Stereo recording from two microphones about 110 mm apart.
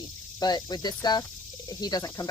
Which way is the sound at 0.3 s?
40° left (ahead or behind).